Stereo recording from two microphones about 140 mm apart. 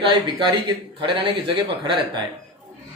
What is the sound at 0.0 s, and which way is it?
A man's voice, 35° right (ahead or behind).